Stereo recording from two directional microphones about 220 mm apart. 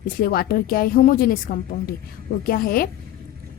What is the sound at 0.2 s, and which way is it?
A woman's voice, 40° left (ahead or behind).